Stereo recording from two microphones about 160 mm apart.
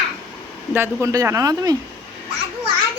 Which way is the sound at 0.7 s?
15° right (ahead or behind).